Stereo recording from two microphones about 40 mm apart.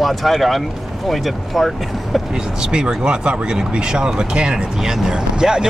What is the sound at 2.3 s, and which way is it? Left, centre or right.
Speech, centre.